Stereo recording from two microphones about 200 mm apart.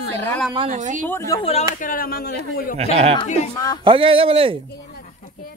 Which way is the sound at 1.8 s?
45° left (ahead or behind).